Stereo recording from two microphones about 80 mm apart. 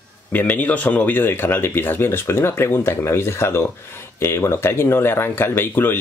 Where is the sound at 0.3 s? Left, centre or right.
Left.